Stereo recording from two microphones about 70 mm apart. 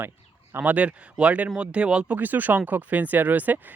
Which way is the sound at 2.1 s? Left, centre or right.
Right.